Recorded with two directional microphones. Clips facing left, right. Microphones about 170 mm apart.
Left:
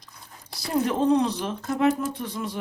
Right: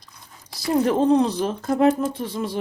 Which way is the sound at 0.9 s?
35° right (ahead or behind).